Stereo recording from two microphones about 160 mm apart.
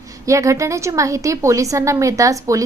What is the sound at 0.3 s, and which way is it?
A woman's voice, 20° right (ahead or behind).